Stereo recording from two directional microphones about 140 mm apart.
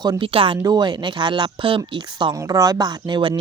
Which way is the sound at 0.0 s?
35° right (ahead or behind).